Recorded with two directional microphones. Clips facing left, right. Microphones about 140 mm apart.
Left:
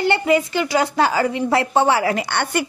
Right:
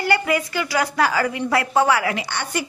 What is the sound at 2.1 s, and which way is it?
Speech, 55° left (ahead or behind).